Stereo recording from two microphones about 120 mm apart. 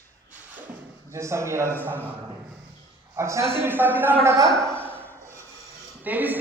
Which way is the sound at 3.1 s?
25° right (ahead or behind).